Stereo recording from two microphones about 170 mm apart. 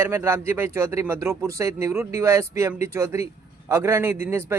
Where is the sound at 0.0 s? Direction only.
15° right (ahead or behind).